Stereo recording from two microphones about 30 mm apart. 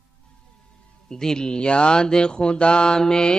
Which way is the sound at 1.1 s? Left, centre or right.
Centre.